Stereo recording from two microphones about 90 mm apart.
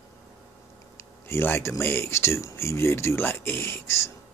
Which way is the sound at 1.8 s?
30° left (ahead or behind).